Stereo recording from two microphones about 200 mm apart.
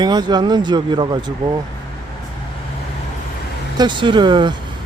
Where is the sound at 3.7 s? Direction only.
20° right (ahead or behind).